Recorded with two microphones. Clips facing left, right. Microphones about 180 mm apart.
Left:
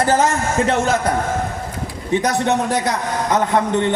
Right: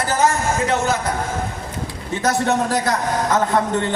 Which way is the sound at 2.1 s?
20° left (ahead or behind).